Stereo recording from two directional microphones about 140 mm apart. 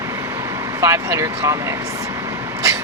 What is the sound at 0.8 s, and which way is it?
Speech, 20° right (ahead or behind).